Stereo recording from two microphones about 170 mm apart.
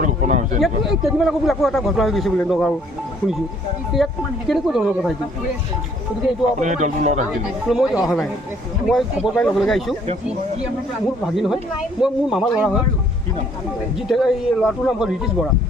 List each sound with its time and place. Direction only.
0.0 s a sound: 45° right (ahead or behind)
0.6 s a man's voice: centre (ahead or behind)
3.9 s a man's voice: centre (ahead or behind)
6.6 s speech: 45° right (ahead or behind)
7.7 s a man's voice: 5° right (ahead or behind)
11.3 s a man's voice: centre (ahead or behind)
14.1 s a man's voice: centre (ahead or behind)